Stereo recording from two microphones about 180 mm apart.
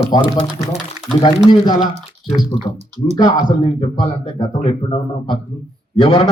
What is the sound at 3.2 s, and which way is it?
Speech, 20° left (ahead or behind).